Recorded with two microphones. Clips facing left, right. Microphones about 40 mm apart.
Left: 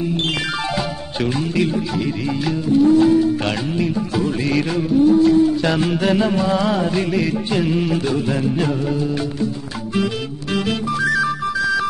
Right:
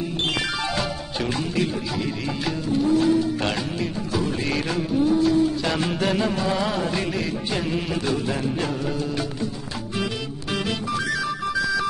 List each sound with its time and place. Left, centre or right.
2.8 s music: centre